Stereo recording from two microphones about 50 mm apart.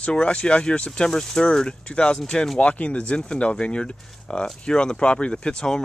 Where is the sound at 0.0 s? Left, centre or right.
Left.